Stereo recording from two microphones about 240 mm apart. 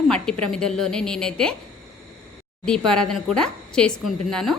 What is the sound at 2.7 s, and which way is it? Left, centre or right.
A woman's voice, centre.